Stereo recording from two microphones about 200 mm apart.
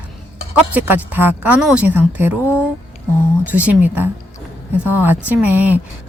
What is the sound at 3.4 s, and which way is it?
Speech, 10° right (ahead or behind).